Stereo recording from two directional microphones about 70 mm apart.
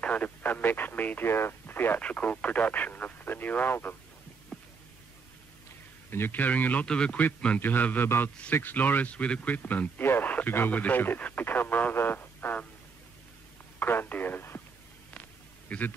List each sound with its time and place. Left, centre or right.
0.0 s speech: centre
2.0 s speech: centre
4.5 s a sound: centre
6.0 s speech: left
6.9 s a man's voice: centre; by 12.6 s left
13.7 s speech: left
15.7 s speech: centre